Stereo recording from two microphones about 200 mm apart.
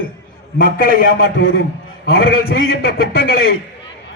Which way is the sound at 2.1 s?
50° left (ahead or behind).